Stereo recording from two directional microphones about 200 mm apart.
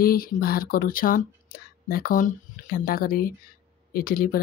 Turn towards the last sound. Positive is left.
turn(degrees=45)  # may be behind; listen again after turning